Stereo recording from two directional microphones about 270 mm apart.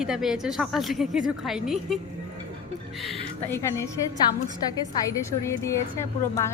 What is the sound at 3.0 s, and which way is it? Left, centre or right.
Speech, centre.